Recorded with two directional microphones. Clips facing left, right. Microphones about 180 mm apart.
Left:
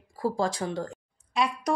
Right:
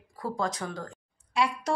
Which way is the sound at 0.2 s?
30° left (ahead or behind).